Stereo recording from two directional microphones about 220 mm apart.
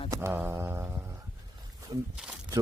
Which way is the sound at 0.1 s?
10° right (ahead or behind).